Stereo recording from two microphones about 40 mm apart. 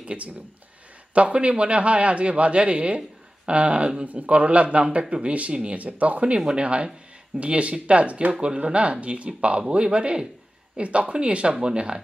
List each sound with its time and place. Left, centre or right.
0.0 s speech: right